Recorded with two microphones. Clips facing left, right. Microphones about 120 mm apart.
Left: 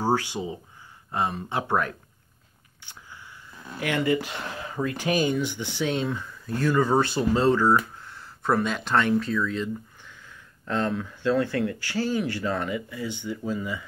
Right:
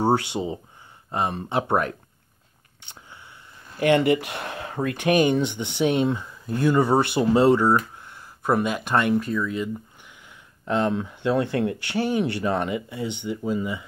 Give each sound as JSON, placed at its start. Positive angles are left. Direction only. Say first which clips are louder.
{"t": 0.0, "sound": "speech", "louder": "right 3 dB", "side_deg": -20}
{"t": 2.8, "sound": "a sound", "louder": "even", "side_deg": -25}
{"t": 4.0, "sound": "speech", "louder": "right 3 dB", "side_deg": -65}
{"t": 5.4, "sound": "speech", "louder": "right 5 dB", "side_deg": -20}